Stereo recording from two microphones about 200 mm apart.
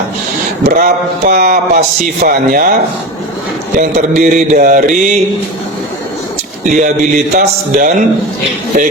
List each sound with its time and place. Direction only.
0.6 s speech: 45° right (ahead or behind)
3.8 s mantra: 40° right (ahead or behind)
6.7 s mantra: 40° right (ahead or behind)